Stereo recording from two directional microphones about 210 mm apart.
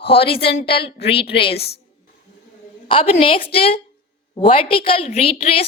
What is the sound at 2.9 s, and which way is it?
A woman's voice, 25° left (ahead or behind).